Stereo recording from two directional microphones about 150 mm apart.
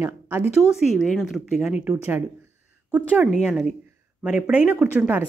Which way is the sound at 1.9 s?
15° right (ahead or behind).